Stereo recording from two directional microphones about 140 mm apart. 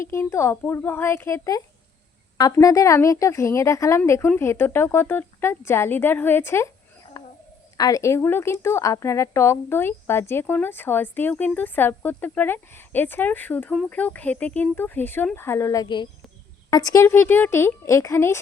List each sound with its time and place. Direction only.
0.0 s speech: 20° left (ahead or behind)
7.2 s a sound: 25° left (ahead or behind)
7.8 s speech: 25° left (ahead or behind)